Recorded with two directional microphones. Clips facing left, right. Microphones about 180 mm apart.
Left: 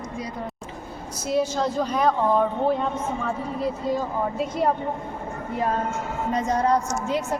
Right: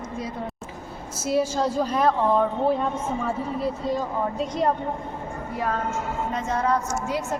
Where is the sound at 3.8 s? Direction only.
5° left (ahead or behind).